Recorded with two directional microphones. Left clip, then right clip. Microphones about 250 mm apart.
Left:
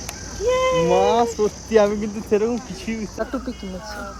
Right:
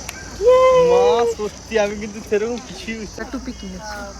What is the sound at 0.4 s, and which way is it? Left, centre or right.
Cricket, centre.